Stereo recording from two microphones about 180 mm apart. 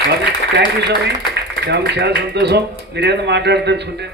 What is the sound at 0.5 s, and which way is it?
Speech, 70° right (ahead or behind).